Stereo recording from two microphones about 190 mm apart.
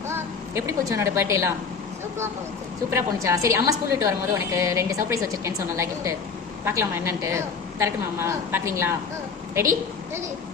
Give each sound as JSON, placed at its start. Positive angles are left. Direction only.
{"t": 0.1, "sound": "a woman's voice", "side_deg": -15}
{"t": 2.9, "sound": "a woman's voice", "side_deg": -15}